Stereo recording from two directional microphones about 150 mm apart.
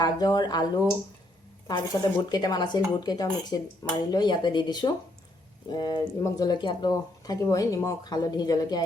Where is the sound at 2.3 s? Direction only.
30° left (ahead or behind).